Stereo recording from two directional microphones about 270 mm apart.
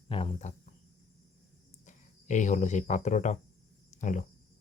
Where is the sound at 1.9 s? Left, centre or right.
Left.